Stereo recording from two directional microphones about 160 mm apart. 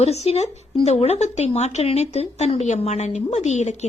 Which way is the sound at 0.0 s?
40° left (ahead or behind).